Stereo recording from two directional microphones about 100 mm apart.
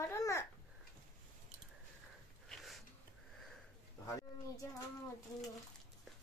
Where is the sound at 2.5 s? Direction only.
Centre (ahead or behind).